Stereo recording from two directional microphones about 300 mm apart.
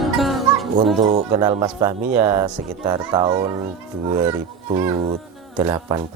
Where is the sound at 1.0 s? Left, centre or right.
Right.